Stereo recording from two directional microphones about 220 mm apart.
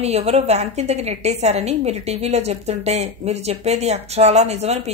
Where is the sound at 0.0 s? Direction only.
30° right (ahead or behind).